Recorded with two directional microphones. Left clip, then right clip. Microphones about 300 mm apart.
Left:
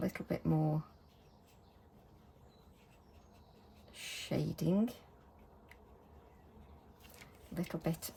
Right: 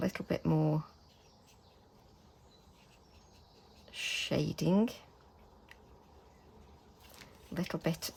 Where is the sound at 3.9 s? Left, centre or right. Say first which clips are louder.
Right 9 dB; centre.